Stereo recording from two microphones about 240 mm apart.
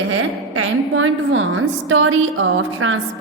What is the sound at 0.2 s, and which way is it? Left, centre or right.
A woman's voice, right.